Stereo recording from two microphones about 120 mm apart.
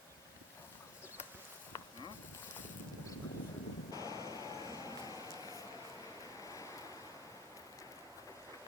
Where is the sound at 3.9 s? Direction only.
30° left (ahead or behind).